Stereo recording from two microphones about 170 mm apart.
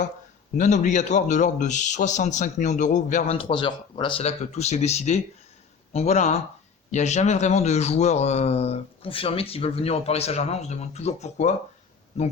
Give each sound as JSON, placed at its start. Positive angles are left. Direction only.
{"t": 0.5, "sound": "a man's voice", "side_deg": 45}
{"t": 3.3, "sound": "speech", "side_deg": 30}